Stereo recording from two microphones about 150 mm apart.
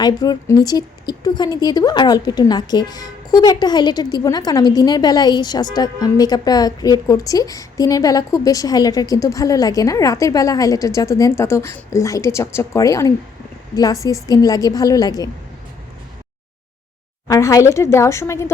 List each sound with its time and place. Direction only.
0.0 s a woman's voice: 25° left (ahead or behind)
17.2 s a woman's voice: 20° left (ahead or behind)